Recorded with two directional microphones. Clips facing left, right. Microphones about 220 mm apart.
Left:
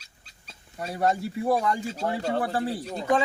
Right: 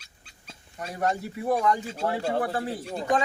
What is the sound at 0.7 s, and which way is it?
Speech, 35° left (ahead or behind).